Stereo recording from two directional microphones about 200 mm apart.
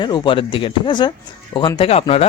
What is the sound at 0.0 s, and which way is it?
A man's voice, 25° left (ahead or behind).